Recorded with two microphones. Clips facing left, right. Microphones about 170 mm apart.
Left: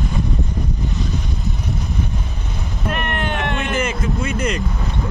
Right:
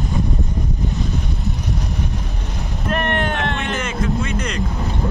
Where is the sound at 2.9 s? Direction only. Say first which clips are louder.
Right 3 dB; 35° right (ahead or behind).